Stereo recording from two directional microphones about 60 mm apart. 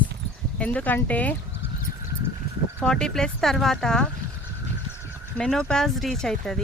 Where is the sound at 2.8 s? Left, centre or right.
Centre.